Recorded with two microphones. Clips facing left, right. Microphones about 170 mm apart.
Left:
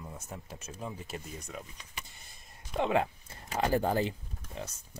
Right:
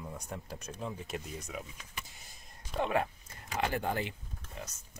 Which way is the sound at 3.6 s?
35° left (ahead or behind).